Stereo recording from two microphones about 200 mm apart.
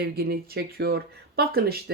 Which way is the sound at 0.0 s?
55° right (ahead or behind).